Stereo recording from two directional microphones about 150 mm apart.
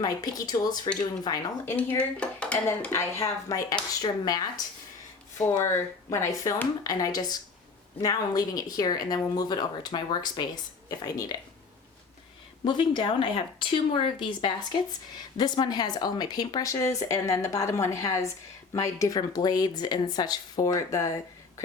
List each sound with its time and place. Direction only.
0.0 s speech: 25° left (ahead or behind)
1.6 s dishes: 10° left (ahead or behind)
4.0 s speech: 25° left (ahead or behind)
12.6 s speech: 30° left (ahead or behind)